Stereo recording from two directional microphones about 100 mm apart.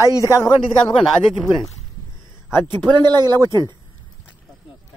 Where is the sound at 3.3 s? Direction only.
30° left (ahead or behind).